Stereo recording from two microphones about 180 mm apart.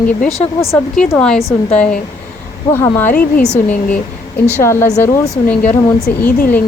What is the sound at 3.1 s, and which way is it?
Speech, 50° left (ahead or behind).